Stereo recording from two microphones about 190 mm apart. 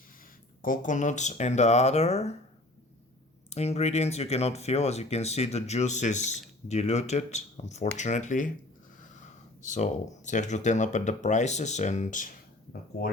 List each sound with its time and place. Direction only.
0.6 s speech: 45° left (ahead or behind)
3.5 s speech: 35° left (ahead or behind)
9.6 s speech: 40° left (ahead or behind)